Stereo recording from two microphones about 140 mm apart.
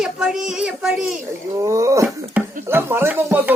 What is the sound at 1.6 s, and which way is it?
Speech, 20° right (ahead or behind).